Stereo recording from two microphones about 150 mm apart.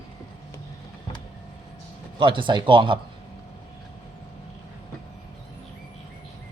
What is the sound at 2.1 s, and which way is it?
Speech, 35° right (ahead or behind).